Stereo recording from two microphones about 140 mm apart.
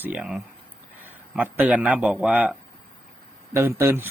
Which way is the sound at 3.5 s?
20° right (ahead or behind).